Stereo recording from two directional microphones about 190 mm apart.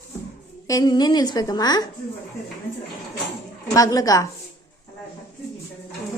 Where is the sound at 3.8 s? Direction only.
20° left (ahead or behind).